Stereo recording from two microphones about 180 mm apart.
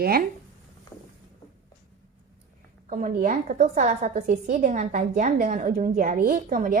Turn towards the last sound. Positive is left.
turn(degrees=-50)  # may be behind; listen again after turning